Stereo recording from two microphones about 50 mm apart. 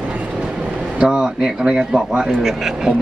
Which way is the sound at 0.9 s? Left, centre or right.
Centre.